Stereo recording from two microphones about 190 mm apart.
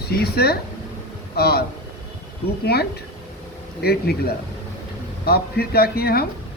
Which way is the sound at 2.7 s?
55° left (ahead or behind).